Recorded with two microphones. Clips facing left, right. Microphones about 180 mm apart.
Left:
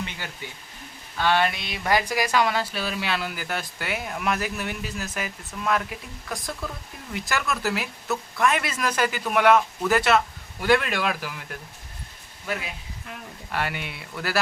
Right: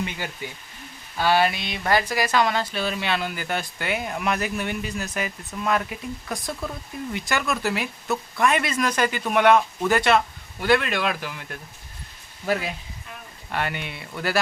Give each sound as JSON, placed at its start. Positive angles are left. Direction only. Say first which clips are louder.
{"t": 0.4, "sound": "speech", "louder": "right 3 dB", "side_deg": -15}
{"t": 12.5, "sound": "speech", "louder": "right 6 dB", "side_deg": -40}
{"t": 13.5, "sound": "speech", "louder": "right 1 dB", "side_deg": 5}